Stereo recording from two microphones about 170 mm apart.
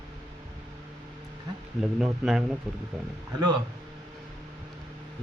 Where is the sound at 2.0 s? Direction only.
5° right (ahead or behind).